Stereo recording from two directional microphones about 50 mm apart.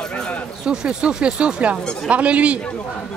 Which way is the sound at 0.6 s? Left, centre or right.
Centre.